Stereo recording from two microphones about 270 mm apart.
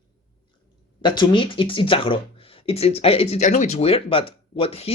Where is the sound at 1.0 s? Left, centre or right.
Centre.